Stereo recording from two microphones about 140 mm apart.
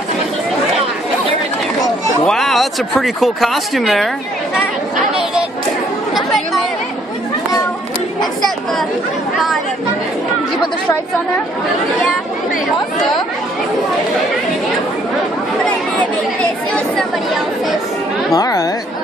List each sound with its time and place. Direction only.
2.2 s speech: centre (ahead or behind)
4.9 s chatter: 5° right (ahead or behind)
8.2 s chatter: centre (ahead or behind)
16.7 s speech: 5° left (ahead or behind)
18.3 s speech: 25° left (ahead or behind)